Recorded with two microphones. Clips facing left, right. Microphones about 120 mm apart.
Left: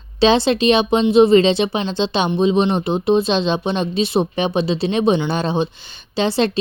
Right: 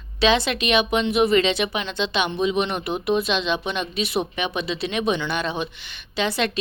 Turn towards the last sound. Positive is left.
turn(degrees=30)  # may be behind; listen again after turning